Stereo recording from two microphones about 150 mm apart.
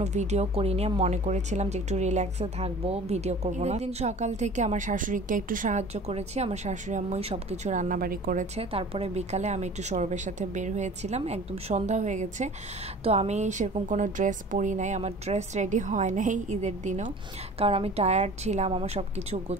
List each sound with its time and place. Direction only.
0.0 s speech: 50° right (ahead or behind); by 8.5 s 70° right (ahead or behind)
8.5 s speech: 40° right (ahead or behind)
17.6 s speech: 40° right (ahead or behind)